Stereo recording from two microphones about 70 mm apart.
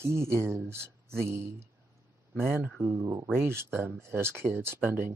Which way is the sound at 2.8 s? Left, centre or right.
Right.